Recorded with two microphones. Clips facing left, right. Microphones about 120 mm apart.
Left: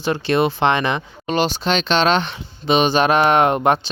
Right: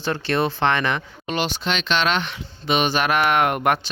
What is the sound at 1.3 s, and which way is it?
Speech, 35° left (ahead or behind).